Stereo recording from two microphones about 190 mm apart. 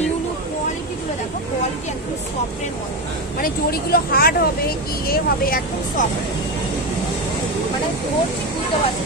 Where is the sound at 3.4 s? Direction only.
50° left (ahead or behind).